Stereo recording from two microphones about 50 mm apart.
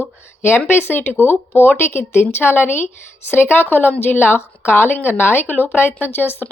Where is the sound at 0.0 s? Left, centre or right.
Left.